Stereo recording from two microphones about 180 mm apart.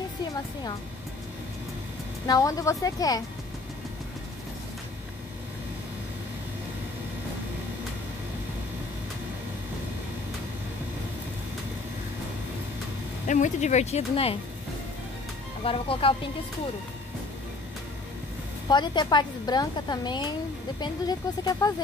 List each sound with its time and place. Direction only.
2.2 s a woman's voice: 20° left (ahead or behind)
13.3 s speech: 40° left (ahead or behind)
15.6 s speech: 30° left (ahead or behind)
18.7 s a woman's voice: 25° left (ahead or behind)